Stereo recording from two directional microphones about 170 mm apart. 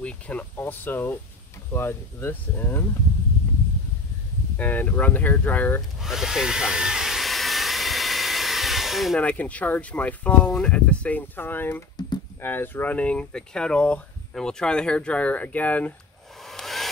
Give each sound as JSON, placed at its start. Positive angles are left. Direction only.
{"t": 0.0, "sound": "speech", "side_deg": 10}
{"t": 4.6, "sound": "speech", "side_deg": 10}
{"t": 5.9, "sound": "speech", "side_deg": 0}
{"t": 16.4, "sound": "hair dryer", "side_deg": 0}